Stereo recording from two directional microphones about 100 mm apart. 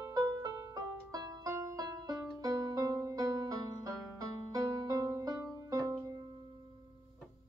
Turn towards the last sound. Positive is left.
turn(degrees=-35)  # may be behind; listen again after turning